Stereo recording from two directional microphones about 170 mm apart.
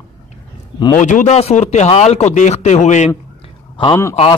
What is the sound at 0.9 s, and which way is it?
Speech, 45° left (ahead or behind).